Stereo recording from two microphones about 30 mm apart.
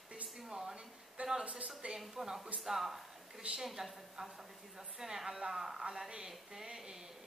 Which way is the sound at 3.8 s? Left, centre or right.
Centre.